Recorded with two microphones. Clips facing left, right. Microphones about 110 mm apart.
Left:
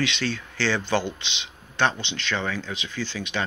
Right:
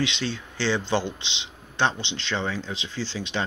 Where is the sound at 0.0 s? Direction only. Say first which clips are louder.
Left 1 dB; 20° right (ahead or behind).